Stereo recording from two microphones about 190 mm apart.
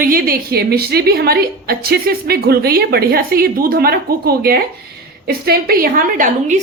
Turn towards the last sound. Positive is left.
turn(degrees=-40)  # may be behind; listen again after turning